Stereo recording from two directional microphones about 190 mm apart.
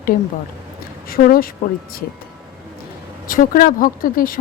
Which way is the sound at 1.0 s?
50° left (ahead or behind).